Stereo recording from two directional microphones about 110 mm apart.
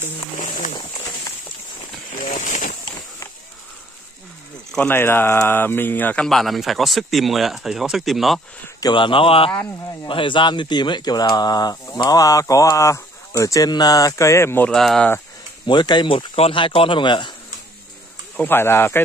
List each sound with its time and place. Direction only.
4.7 s speech: 20° left (ahead or behind)
6.2 s speech: centre (ahead or behind)
8.8 s speech: 50° left (ahead or behind); by 14.7 s 20° left (ahead or behind)
14.7 s speech: 5° left (ahead or behind)
15.6 s speech: 45° left (ahead or behind)
16.3 s speech: 55° left (ahead or behind)
18.3 s speech: 15° left (ahead or behind)